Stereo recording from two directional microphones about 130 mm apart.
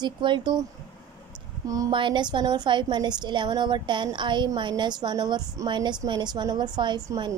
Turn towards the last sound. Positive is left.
turn(degrees=-35)  # may be behind; listen again after turning